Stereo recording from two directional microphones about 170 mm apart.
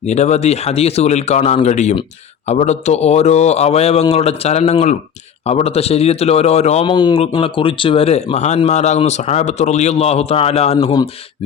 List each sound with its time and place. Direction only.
0.0 s speech: 40° left (ahead or behind)